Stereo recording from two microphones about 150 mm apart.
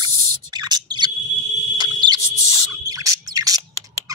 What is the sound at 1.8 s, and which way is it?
Smoke detector, 30° right (ahead or behind).